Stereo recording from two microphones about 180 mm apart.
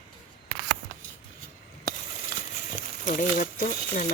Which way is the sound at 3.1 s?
45° left (ahead or behind).